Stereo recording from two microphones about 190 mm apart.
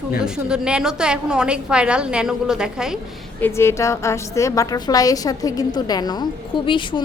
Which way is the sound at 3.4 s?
15° left (ahead or behind).